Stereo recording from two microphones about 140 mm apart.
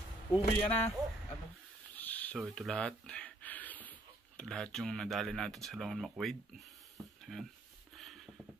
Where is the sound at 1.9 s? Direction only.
10° left (ahead or behind).